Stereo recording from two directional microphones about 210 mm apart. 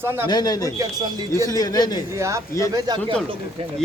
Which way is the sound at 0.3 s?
20° left (ahead or behind).